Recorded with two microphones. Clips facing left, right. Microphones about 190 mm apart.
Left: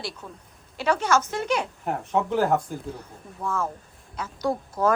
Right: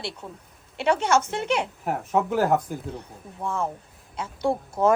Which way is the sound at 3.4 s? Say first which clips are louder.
Even; 30° right (ahead or behind).